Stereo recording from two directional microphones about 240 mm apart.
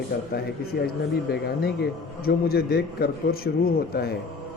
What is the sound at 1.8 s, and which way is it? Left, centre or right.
A man's voice, left.